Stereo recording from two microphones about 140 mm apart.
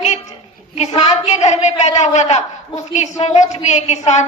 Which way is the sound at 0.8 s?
55° left (ahead or behind).